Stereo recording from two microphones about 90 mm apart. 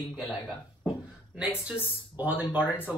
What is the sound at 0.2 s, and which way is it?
Speech, 5° right (ahead or behind).